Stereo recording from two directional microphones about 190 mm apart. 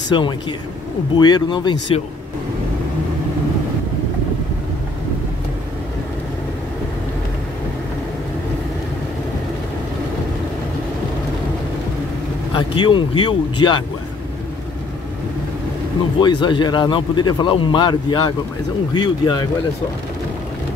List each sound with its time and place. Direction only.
0.1 s speech: 25° left (ahead or behind)
12.5 s speech: 25° left (ahead or behind)
16.2 s speech: 25° left (ahead or behind)